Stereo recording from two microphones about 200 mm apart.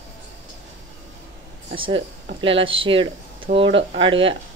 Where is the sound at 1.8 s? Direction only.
25° right (ahead or behind).